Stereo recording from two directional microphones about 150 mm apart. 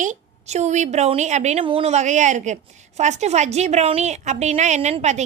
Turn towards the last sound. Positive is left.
turn(degrees=-50)  # may be behind; listen again after turning